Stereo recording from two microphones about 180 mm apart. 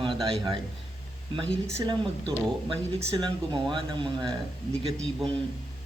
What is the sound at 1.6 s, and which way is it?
Speech, 20° right (ahead or behind).